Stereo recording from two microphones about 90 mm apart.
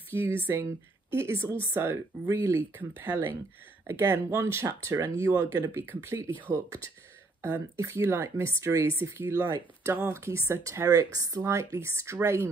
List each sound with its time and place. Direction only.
0.1 s speech: 30° right (ahead or behind)